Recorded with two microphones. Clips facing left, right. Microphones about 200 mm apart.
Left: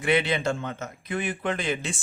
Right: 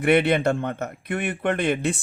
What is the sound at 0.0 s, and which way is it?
Speech, 60° right (ahead or behind).